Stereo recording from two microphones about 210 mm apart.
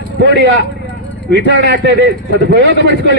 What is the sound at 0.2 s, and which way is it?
A man's voice, 55° right (ahead or behind).